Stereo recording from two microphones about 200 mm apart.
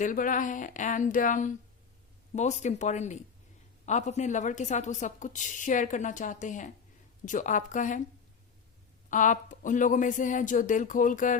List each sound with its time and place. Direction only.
0.0 s a woman's voice: 40° left (ahead or behind)
9.0 s a woman's voice: 40° left (ahead or behind)